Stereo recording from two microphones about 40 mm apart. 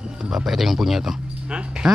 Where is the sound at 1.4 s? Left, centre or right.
Right.